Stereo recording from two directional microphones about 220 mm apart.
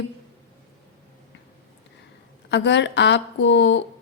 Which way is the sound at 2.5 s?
50° left (ahead or behind).